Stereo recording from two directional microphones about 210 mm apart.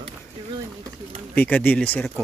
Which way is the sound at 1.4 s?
10° left (ahead or behind).